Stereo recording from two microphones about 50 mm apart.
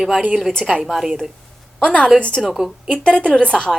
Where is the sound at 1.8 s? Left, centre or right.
Left.